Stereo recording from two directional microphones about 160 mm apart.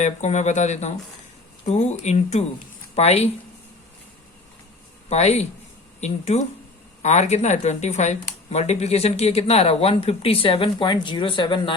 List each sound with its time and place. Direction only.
0.0 s speech: 45° left (ahead or behind)
5.0 s speech: 40° left (ahead or behind)